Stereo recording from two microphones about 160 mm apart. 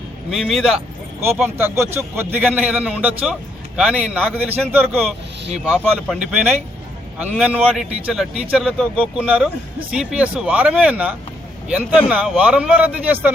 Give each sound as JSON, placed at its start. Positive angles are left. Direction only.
{"t": 0.3, "sound": "speech", "side_deg": 0}
{"t": 1.2, "sound": "a man's voice", "side_deg": -15}